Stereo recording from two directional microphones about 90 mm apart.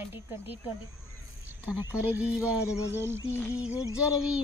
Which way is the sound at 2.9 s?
25° right (ahead or behind).